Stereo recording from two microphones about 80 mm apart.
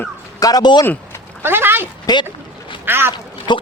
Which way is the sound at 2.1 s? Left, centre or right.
Left.